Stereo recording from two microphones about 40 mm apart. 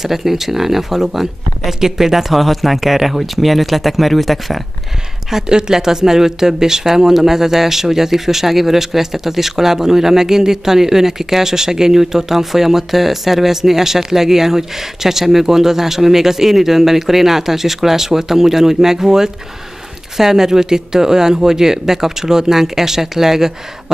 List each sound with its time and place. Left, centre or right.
0.0 s speech: centre
5.5 s speech: centre